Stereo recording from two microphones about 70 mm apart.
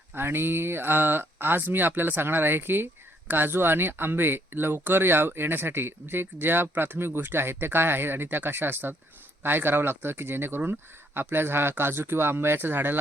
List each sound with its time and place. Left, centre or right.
0.1 s speech: right